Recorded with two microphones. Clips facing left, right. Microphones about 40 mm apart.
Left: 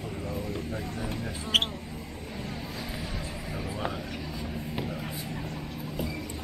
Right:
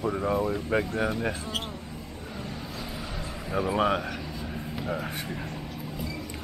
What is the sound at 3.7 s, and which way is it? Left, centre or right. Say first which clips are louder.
Speech: right 10 dB; right.